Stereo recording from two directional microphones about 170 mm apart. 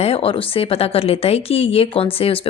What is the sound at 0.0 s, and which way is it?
Speech, 35° left (ahead or behind).